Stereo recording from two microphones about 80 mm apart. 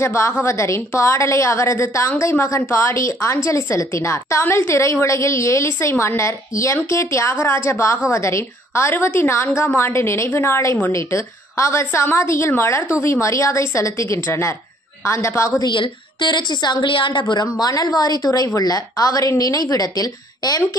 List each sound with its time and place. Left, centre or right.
0.0 s a woman's voice: left
15.6 s a woman's voice: left
17.5 s a woman's voice: left